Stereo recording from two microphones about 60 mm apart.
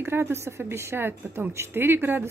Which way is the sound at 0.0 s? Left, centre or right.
Right.